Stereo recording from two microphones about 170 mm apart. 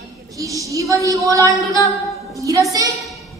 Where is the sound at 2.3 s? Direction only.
20° right (ahead or behind).